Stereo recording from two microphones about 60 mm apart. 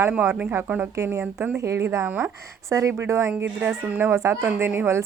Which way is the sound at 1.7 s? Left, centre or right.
Right.